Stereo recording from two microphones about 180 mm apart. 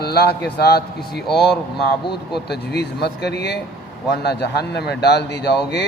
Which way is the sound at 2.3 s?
65° left (ahead or behind).